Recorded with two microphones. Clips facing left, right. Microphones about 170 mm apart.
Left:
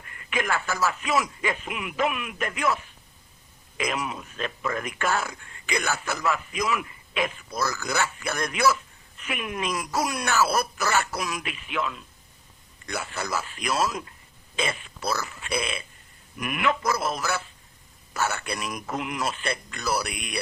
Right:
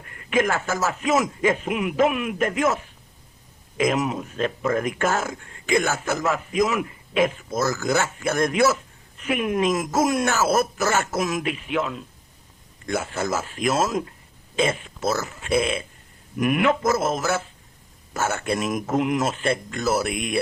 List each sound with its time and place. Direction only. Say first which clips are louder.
0.0 s speech: right 8 dB; 40° right (ahead or behind)